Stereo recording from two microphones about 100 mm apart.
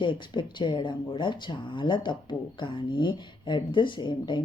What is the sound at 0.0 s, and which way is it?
Speech, 55° left (ahead or behind).